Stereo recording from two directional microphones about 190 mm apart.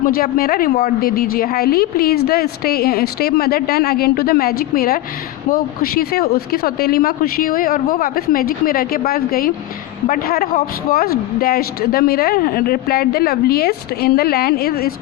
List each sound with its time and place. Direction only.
0.0 s a woman's voice: 50° left (ahead or behind)